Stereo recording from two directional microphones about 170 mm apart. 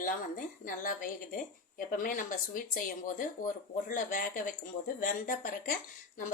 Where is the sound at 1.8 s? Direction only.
55° left (ahead or behind).